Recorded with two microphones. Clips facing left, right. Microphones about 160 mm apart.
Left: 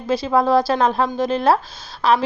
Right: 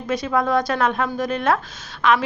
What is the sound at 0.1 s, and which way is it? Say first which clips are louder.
A woman's voice: left 4 dB; 30° left (ahead or behind).